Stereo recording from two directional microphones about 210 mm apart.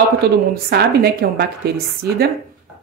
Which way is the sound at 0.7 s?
50° right (ahead or behind).